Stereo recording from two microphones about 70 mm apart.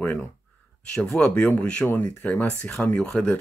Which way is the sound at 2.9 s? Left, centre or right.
Centre.